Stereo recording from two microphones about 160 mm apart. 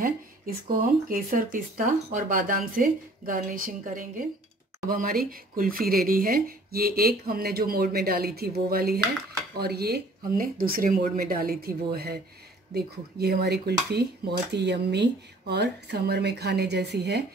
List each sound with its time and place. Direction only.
0.7 s speech: 60° right (ahead or behind)
9.6 s speech: 80° right